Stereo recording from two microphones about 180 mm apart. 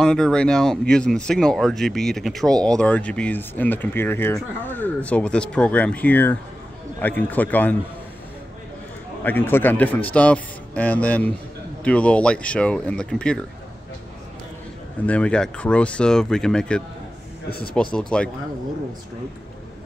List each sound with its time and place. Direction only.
0.0 s speech: 5° left (ahead or behind)
9.2 s speech: 10° left (ahead or behind)
15.0 s speech: 5° left (ahead or behind)
17.9 s speech: 5° left (ahead or behind)